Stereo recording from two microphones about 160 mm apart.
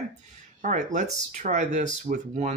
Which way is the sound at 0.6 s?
50° right (ahead or behind).